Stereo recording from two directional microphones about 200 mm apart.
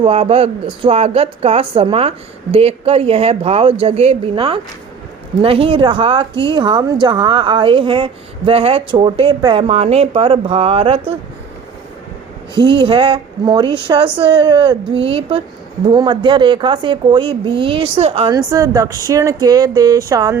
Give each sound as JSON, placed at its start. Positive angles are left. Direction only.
{"t": 0.0, "sound": "a woman's voice", "side_deg": -30}
{"t": 12.8, "sound": "a woman's voice", "side_deg": -25}